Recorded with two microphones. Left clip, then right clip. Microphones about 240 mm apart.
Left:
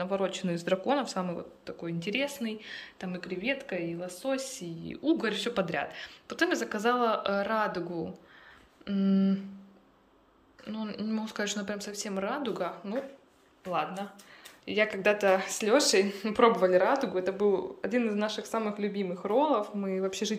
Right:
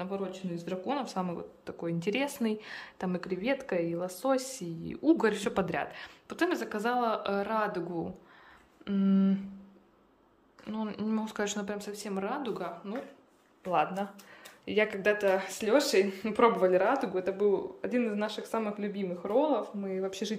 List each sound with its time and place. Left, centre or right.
0.0 s speech: centre
10.6 s speech: centre